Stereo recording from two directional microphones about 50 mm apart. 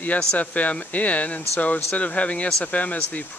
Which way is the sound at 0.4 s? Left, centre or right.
Left.